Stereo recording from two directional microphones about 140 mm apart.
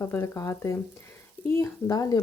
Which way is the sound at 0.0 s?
20° left (ahead or behind).